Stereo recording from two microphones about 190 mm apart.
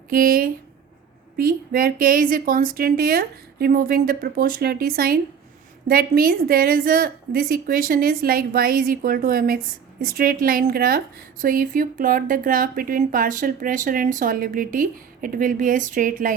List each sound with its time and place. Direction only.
0.1 s a woman's voice: 50° right (ahead or behind)